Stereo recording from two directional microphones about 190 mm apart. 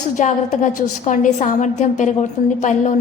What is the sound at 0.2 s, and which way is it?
A woman's voice, 40° left (ahead or behind).